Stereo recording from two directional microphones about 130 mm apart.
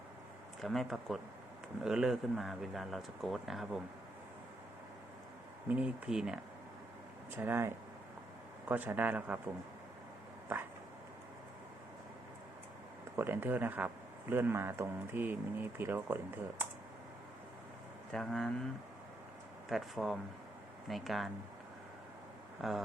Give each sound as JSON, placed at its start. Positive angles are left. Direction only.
{"t": 0.6, "sound": "speech", "side_deg": 0}
{"t": 5.6, "sound": "speech", "side_deg": -10}
{"t": 7.3, "sound": "speech", "side_deg": -15}
{"t": 13.1, "sound": "speech", "side_deg": -15}
{"t": 18.1, "sound": "speech", "side_deg": 0}
{"t": 19.6, "sound": "speech", "side_deg": 0}
{"t": 22.6, "sound": "speech", "side_deg": -5}